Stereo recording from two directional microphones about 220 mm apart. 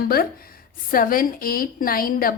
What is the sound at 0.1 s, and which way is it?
A woman's voice, 45° left (ahead or behind).